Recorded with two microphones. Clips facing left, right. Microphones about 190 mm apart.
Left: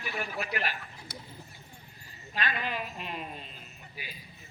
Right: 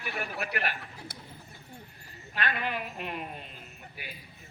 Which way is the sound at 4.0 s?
60° right (ahead or behind).